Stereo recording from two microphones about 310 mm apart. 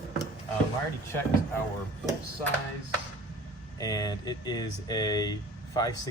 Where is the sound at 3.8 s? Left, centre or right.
Centre.